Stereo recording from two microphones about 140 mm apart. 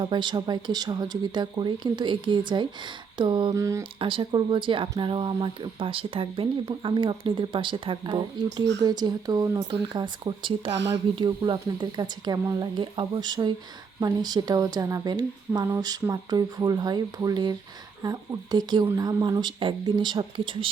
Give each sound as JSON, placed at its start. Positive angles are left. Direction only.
{"t": 0.0, "sound": "a woman's voice", "side_deg": -30}
{"t": 4.0, "sound": "a woman's voice", "side_deg": -40}